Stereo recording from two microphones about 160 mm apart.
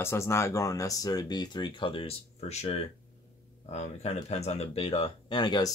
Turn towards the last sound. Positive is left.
turn(degrees=30)  # may be behind; listen again after turning